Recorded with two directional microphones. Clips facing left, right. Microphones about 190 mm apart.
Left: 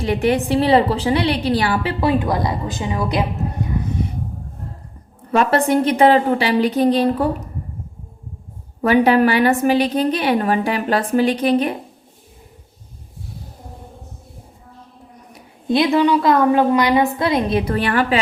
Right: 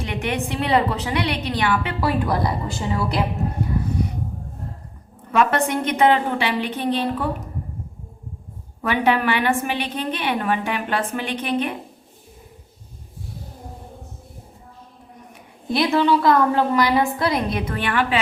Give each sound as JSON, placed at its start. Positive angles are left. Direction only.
{"t": 0.0, "sound": "a woman's voice", "side_deg": 35}
{"t": 5.3, "sound": "a woman's voice", "side_deg": 35}
{"t": 8.8, "sound": "a woman's voice", "side_deg": 40}
{"t": 15.7, "sound": "a woman's voice", "side_deg": 20}
{"t": 17.7, "sound": "a woman's voice", "side_deg": 40}